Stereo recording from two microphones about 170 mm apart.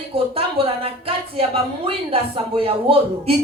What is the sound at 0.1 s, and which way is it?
A woman's voice, 35° right (ahead or behind).